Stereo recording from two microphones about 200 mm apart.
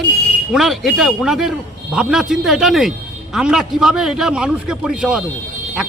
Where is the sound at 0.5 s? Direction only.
Centre (ahead or behind).